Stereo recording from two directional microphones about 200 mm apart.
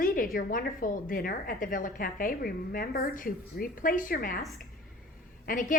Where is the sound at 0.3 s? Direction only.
45° left (ahead or behind).